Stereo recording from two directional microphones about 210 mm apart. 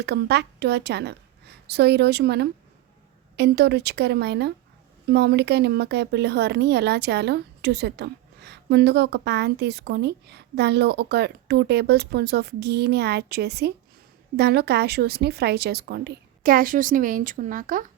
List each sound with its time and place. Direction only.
0.0 s a woman's voice: 55° right (ahead or behind)